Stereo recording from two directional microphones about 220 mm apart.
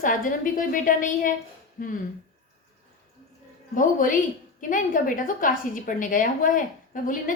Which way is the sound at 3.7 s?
35° left (ahead or behind).